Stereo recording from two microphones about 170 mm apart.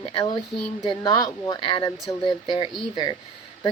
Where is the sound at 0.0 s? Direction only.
30° left (ahead or behind).